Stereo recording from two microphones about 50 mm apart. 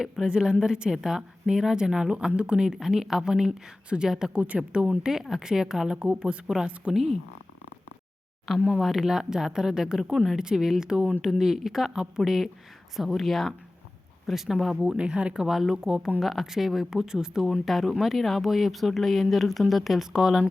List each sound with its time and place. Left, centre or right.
0.0 s speech: centre
4.4 s speech: right
5.3 s speech: centre
8.5 s speech: right
8.8 s speech: centre
14.8 s speech: centre
17.7 s speech: centre